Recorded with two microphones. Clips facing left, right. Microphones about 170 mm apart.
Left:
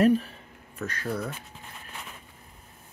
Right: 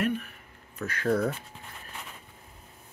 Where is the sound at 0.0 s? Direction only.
35° left (ahead or behind).